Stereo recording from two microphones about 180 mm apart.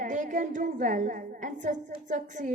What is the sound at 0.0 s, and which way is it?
A woman's voice, 45° right (ahead or behind).